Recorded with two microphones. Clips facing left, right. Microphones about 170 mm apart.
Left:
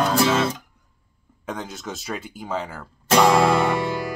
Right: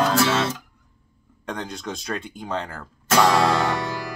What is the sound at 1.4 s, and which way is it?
Speech, 5° left (ahead or behind).